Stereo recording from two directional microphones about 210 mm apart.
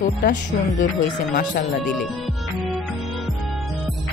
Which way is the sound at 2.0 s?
Centre (ahead or behind).